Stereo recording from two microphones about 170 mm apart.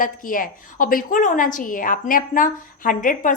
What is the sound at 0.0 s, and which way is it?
A woman's voice, 55° left (ahead or behind).